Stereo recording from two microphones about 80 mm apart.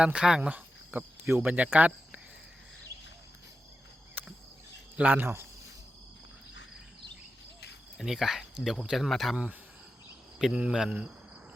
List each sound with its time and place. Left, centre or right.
0.0 s speech: centre
0.5 s cricket: right
1.3 s speech: right
4.2 s cricket: right
4.9 s speech: right
7.9 s speech: centre
9.3 s speech: centre